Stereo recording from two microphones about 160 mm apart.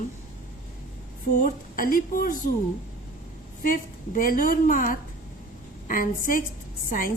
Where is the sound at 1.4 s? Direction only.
60° left (ahead or behind).